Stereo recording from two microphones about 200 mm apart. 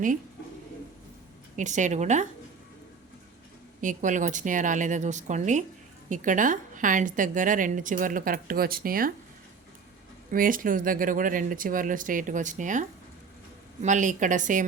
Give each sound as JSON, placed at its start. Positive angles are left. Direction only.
{"t": 1.5, "sound": "a woman's voice", "side_deg": -35}
{"t": 3.8, "sound": "a woman's voice", "side_deg": -40}
{"t": 10.3, "sound": "speech", "side_deg": -45}
{"t": 13.8, "sound": "a woman's voice", "side_deg": -40}